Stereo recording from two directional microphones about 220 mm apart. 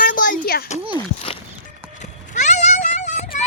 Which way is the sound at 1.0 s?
25° left (ahead or behind).